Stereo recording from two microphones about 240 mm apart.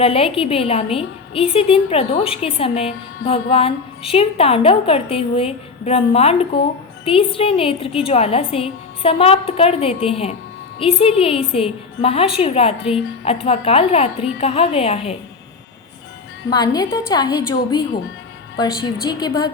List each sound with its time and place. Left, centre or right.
0.0 s a woman's voice: left
16.5 s a woman's voice: centre
19.0 s a woman's voice: centre